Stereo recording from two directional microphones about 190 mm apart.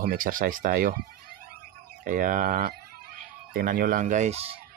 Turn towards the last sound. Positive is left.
turn(degrees=-35)  # may be behind; listen again after turning